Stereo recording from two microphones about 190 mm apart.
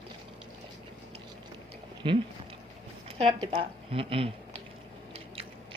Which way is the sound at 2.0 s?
25° right (ahead or behind).